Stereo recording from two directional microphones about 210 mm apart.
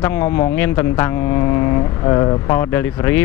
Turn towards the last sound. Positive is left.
turn(degrees=10)  # may be behind; listen again after turning